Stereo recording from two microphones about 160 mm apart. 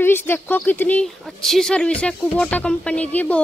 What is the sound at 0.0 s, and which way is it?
Speech, 15° left (ahead or behind).